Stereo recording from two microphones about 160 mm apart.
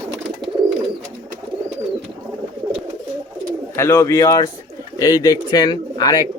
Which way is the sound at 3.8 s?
15° left (ahead or behind).